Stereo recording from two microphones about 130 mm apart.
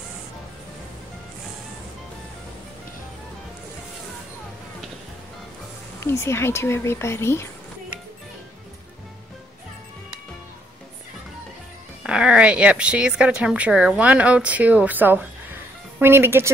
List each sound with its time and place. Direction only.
5.9 s speech: 20° left (ahead or behind)
12.0 s a woman's voice: 5° right (ahead or behind)